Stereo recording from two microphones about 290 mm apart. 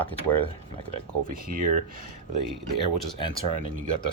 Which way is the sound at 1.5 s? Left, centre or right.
Right.